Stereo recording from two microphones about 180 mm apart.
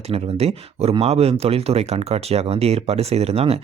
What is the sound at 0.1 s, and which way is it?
Speech, 35° right (ahead or behind).